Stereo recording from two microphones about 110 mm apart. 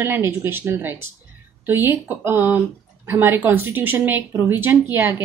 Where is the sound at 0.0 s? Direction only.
20° right (ahead or behind).